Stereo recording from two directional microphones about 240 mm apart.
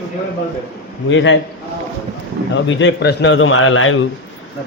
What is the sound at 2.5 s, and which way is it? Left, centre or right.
A man's voice, left.